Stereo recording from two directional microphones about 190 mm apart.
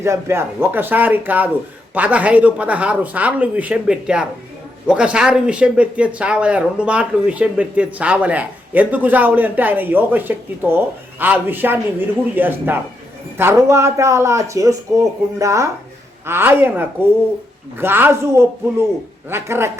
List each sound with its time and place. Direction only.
0.0 s speech: 15° right (ahead or behind)